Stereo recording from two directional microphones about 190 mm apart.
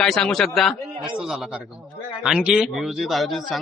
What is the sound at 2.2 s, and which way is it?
A man's voice, 5° right (ahead or behind).